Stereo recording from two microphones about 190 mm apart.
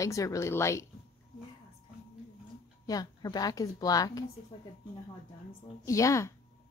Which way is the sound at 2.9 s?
20° left (ahead or behind).